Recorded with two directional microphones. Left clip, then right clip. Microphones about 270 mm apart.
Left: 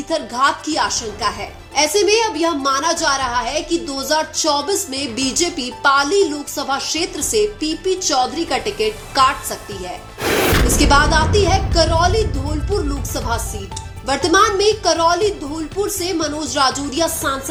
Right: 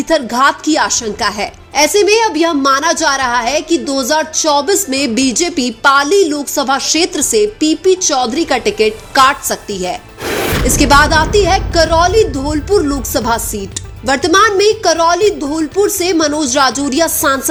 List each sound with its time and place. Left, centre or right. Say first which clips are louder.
0.1 s a woman's voice: right 6 dB; right
10.2 s music: even; centre
10.8 s a woman's voice: right 7 dB; right